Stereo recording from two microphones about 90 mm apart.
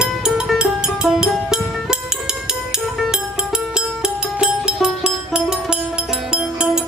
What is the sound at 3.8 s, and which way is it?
Music, 10° right (ahead or behind).